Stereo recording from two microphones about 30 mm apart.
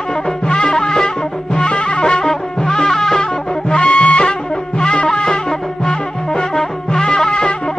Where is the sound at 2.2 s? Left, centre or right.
Centre.